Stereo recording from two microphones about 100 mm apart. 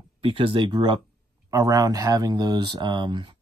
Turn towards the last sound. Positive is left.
turn(degrees=-50)  # may be behind; listen again after turning